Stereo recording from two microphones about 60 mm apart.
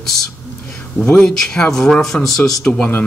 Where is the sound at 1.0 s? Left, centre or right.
Centre.